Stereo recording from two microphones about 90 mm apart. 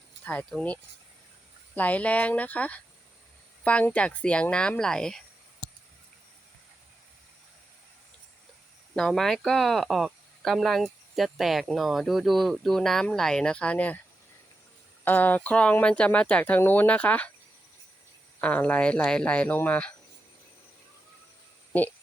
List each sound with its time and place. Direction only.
1.7 s speech: 15° left (ahead or behind)
9.0 s speech: 5° left (ahead or behind)
15.0 s speech: 20° left (ahead or behind)
18.3 s speech: 15° left (ahead or behind)